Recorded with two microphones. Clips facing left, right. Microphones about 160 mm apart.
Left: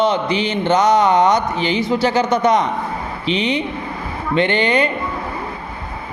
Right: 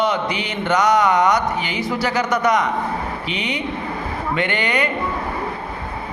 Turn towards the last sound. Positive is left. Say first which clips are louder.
# left 5 dB
turn(degrees=30)  # may be behind; listen again after turning